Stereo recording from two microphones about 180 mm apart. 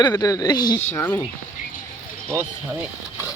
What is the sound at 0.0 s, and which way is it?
Speech, 20° left (ahead or behind).